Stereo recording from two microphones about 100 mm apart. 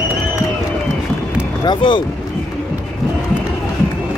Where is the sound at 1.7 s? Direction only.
55° left (ahead or behind).